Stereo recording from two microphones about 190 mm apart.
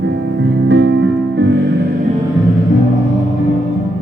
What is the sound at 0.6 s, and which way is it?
Music, 70° right (ahead or behind).